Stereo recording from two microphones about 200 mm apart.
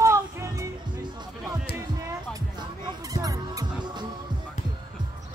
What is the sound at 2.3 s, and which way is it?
Music, 20° right (ahead or behind).